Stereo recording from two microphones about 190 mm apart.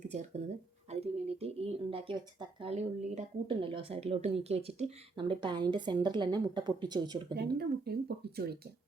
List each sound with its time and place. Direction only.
0.1 s speech: 35° right (ahead or behind)
7.3 s speech: 55° right (ahead or behind)